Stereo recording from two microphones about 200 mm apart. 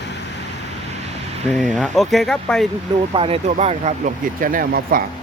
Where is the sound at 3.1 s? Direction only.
30° right (ahead or behind); by 5.0 s 45° right (ahead or behind).